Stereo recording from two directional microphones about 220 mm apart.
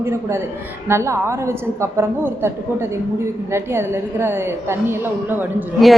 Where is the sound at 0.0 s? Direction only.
10° right (ahead or behind).